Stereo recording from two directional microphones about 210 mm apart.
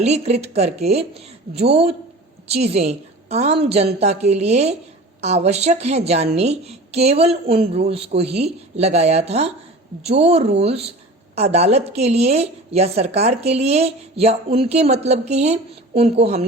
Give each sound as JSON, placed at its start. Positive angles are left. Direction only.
{"t": 0.0, "sound": "a woman's voice", "side_deg": -30}